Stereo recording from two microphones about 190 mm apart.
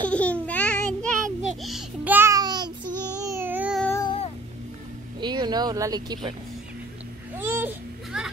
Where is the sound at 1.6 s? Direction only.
Centre (ahead or behind); by 2.9 s 20° right (ahead or behind).